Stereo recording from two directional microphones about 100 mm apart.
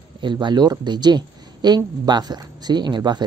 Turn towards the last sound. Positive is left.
turn(degrees=-45)  # may be behind; listen again after turning